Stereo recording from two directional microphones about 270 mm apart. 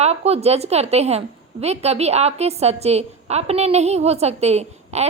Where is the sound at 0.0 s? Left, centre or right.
Right.